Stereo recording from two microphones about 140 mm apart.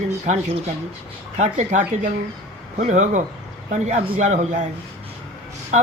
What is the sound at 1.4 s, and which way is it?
Speech, 60° right (ahead or behind).